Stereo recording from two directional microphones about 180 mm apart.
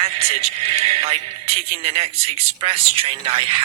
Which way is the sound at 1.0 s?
35° right (ahead or behind).